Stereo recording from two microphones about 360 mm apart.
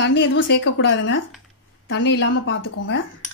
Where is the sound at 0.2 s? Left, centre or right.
Left.